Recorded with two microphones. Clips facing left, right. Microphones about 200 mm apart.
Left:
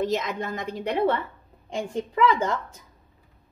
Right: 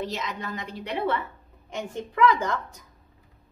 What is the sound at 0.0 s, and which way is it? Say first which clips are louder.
A woman's voice: left 6 dB; 50° left (ahead or behind).